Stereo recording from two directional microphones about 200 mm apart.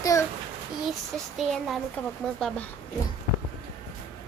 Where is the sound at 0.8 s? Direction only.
Centre (ahead or behind).